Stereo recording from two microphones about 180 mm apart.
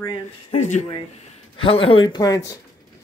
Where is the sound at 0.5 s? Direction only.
40° left (ahead or behind).